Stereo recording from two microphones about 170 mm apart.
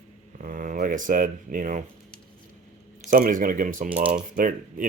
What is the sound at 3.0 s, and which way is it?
Speech, 50° right (ahead or behind).